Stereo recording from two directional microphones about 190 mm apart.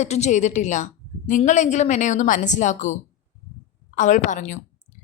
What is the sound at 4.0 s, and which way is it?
Speech, 40° left (ahead or behind).